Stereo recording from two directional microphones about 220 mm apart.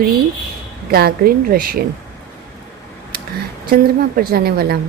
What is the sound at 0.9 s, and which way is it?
Speech, 45° right (ahead or behind).